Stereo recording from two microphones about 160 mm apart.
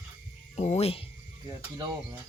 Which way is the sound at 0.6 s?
40° left (ahead or behind).